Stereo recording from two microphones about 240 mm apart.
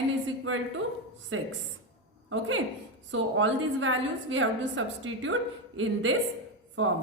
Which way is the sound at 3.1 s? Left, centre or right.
Right.